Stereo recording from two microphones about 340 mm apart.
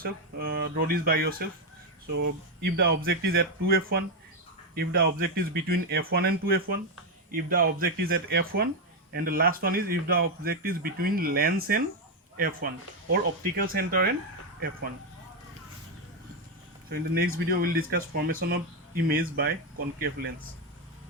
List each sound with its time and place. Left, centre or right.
0.0 s a man's voice: right
16.9 s a man's voice: right